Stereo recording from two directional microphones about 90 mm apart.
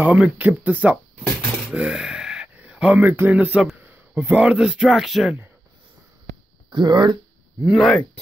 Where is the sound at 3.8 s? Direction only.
25° right (ahead or behind).